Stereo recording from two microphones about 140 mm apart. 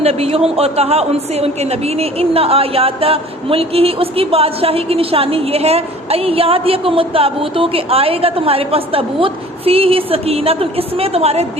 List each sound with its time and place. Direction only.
0.0 s a woman's voice: 45° right (ahead or behind)